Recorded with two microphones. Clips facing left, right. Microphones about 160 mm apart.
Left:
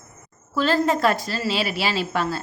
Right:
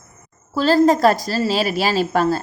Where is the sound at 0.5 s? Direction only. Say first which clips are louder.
Right 6 dB; 35° right (ahead or behind).